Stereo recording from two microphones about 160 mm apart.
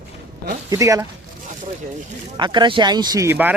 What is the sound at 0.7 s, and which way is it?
Speech, 20° right (ahead or behind).